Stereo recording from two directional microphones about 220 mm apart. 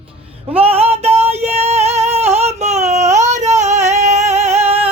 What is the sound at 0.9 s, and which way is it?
Music, 30° right (ahead or behind).